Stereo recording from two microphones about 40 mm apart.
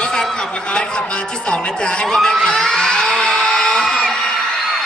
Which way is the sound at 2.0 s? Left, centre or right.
Centre.